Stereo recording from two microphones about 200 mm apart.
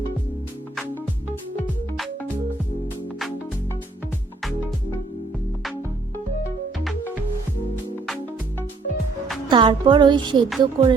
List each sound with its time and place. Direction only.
9.5 s a woman's voice: 25° right (ahead or behind)